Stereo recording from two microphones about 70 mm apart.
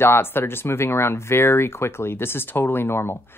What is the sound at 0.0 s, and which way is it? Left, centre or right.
Speech, left.